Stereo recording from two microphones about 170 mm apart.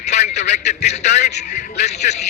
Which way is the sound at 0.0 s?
40° left (ahead or behind).